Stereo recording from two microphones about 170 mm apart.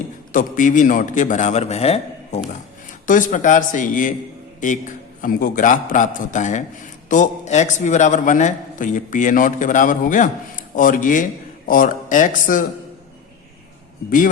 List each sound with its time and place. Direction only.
0.3 s a man's voice: 50° left (ahead or behind)
3.1 s a man's voice: 50° left (ahead or behind)